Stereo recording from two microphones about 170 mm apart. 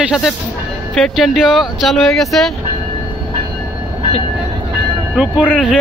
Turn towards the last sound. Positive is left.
turn(degrees=0)  # may be behind; listen again after turning